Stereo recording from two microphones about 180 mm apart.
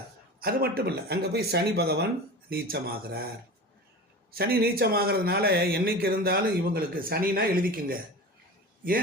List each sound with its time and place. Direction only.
0.3 s a man's voice: 55° right (ahead or behind)
4.3 s a man's voice: 60° right (ahead or behind)